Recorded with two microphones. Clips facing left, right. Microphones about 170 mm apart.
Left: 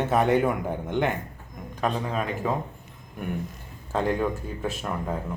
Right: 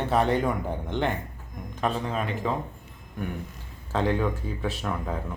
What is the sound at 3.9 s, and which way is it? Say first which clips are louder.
Speech: even; 5° left (ahead or behind).